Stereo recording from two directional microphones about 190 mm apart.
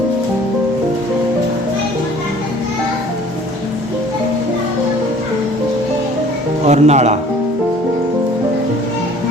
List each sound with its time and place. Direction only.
6.7 s speech: 35° right (ahead or behind)